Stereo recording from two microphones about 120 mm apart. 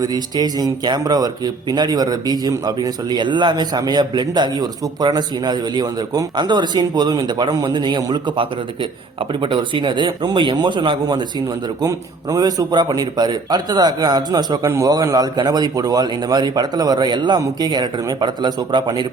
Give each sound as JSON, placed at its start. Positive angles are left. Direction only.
{"t": 0.0, "sound": "a man's voice", "side_deg": -35}
{"t": 11.8, "sound": "a man's voice", "side_deg": -30}